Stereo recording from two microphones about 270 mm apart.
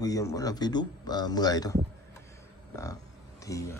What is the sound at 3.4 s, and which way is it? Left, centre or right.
Speech, centre.